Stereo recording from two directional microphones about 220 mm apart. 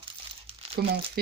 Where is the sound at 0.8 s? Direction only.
45° right (ahead or behind).